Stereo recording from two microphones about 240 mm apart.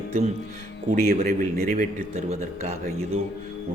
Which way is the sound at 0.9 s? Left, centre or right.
Right.